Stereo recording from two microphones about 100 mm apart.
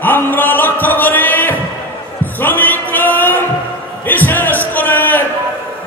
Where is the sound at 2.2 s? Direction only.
20° left (ahead or behind).